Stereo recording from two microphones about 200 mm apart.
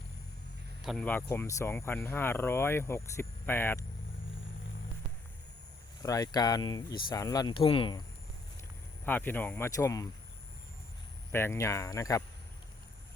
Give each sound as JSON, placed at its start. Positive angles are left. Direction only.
{"t": 0.9, "sound": "speech", "side_deg": 5}
{"t": 6.0, "sound": "speech", "side_deg": 15}
{"t": 9.0, "sound": "speech", "side_deg": 10}
{"t": 11.3, "sound": "speech", "side_deg": 10}